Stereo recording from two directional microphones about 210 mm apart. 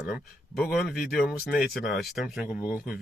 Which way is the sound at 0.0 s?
5° left (ahead or behind).